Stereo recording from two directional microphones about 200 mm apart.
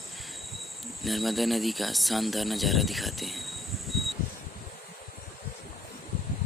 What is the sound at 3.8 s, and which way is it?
Mechanical fan, centre (ahead or behind).